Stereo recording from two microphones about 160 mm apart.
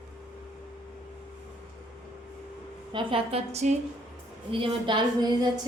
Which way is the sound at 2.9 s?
35° right (ahead or behind).